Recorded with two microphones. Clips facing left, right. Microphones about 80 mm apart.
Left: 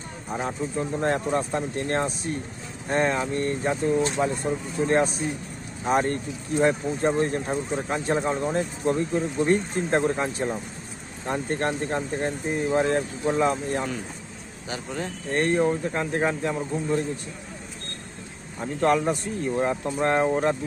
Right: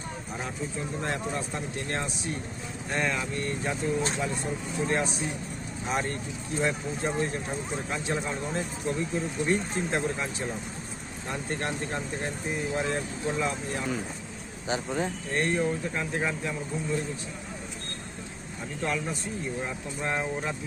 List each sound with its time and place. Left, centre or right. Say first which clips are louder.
0.3 s speech: left 8 dB; left
14.7 s speech: right 2 dB; centre
15.3 s speech: left 7 dB; left
18.6 s speech: left 9 dB; left